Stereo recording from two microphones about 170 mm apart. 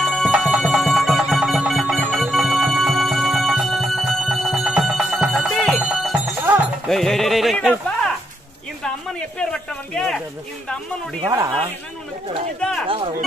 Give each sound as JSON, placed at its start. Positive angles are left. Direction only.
{"t": 0.0, "sound": "music", "side_deg": 0}
{"t": 8.8, "sound": "a sound", "side_deg": 5}
{"t": 11.2, "sound": "speech", "side_deg": -20}
{"t": 12.5, "sound": "music", "side_deg": 5}
{"t": 12.8, "sound": "speech", "side_deg": -30}